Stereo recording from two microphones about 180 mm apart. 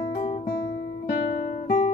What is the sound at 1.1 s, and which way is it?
Guitar, 50° left (ahead or behind).